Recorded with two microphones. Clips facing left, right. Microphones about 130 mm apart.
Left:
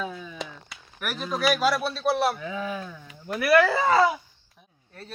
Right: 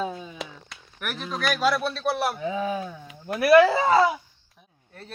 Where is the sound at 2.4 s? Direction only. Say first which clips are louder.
Right 4 dB; 25° right (ahead or behind).